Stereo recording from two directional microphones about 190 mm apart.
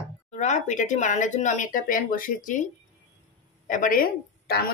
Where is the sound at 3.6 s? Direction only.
45° left (ahead or behind).